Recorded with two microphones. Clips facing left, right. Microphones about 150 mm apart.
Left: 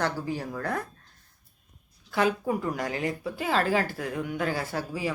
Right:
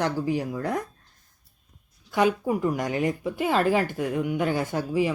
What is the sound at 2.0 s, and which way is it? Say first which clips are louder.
Speech: right 3 dB; 15° right (ahead or behind).